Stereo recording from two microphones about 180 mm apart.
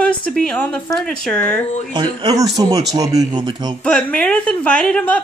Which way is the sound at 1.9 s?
25° right (ahead or behind).